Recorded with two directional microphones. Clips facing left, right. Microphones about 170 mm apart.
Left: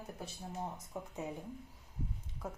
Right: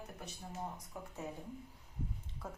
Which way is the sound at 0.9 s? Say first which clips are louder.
Left 7 dB; 20° left (ahead or behind).